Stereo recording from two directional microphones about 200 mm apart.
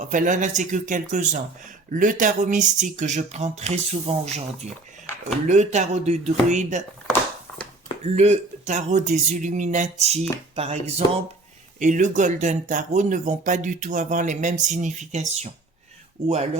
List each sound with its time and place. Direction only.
0.0 s speech: 40° right (ahead or behind)
8.0 s speech: 35° right (ahead or behind)